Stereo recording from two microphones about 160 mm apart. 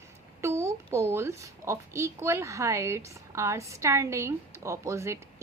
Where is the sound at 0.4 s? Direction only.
15° right (ahead or behind).